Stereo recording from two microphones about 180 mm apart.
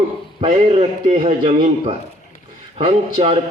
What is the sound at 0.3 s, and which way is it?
A man's voice, 35° right (ahead or behind).